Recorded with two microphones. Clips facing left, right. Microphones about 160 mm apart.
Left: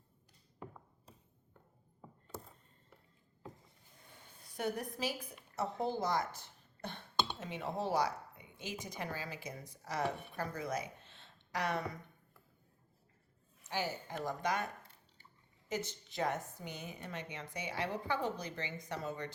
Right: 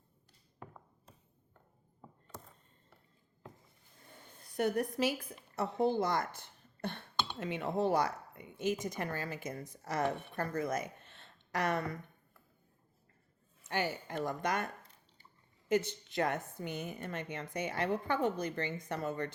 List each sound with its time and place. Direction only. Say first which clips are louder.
4.5 s a woman's voice: right 6 dB; 65° right (ahead or behind)
6.8 s a sound: even; 60° right (ahead or behind)
8.8 s a woman's voice: right 5 dB; 50° right (ahead or behind)
13.7 s a woman's voice: right 3 dB; 60° right (ahead or behind)
15.7 s a woman's voice: right 8 dB; 55° right (ahead or behind)